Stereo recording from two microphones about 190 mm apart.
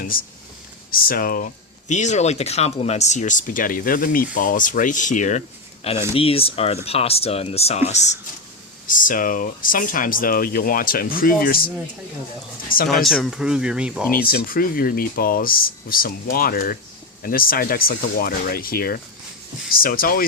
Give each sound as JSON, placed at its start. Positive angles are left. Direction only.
{"t": 0.0, "sound": "speech", "side_deg": 50}
{"t": 1.9, "sound": "speech", "side_deg": 40}
{"t": 12.9, "sound": "speech", "side_deg": 0}
{"t": 14.1, "sound": "speech", "side_deg": 50}